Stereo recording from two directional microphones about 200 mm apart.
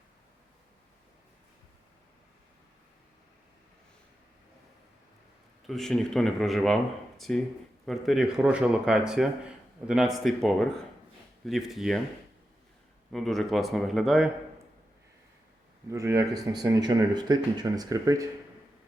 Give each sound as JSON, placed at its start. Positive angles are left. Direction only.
{"t": 5.6, "sound": "speech", "side_deg": 0}
{"t": 13.1, "sound": "speech", "side_deg": 0}
{"t": 15.9, "sound": "speech", "side_deg": -15}